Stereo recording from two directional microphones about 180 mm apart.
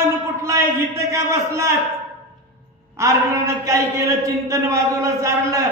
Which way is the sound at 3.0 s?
15° right (ahead or behind).